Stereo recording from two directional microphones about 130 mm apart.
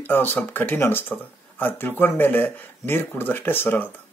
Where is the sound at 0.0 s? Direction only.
15° left (ahead or behind).